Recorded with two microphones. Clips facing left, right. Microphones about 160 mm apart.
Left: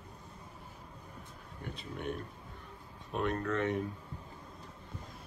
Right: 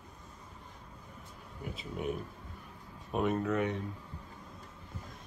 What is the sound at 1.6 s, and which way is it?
Speech, 5° right (ahead or behind).